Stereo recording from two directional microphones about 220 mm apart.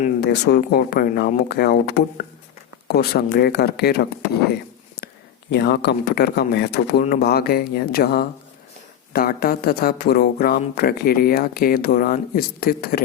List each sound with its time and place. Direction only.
0.2 s speech: 50° left (ahead or behind)
5.5 s speech: 50° left (ahead or behind)